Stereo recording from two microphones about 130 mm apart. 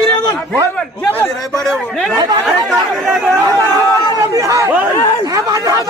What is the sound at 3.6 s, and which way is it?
Speech, 25° right (ahead or behind).